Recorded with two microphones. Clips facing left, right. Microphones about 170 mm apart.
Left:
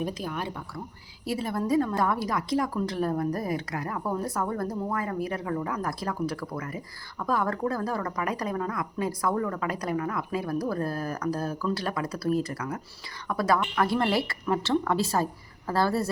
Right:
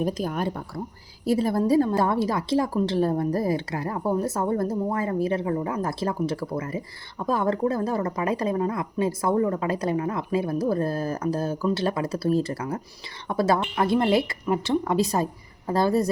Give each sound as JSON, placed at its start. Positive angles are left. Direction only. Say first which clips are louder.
{"t": 0.0, "sound": "a woman's voice", "louder": "right 6 dB", "side_deg": -45}